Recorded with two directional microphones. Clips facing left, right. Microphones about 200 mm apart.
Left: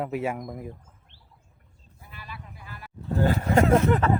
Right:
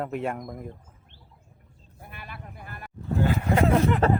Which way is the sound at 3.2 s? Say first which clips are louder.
Left 2 dB; 40° left (ahead or behind).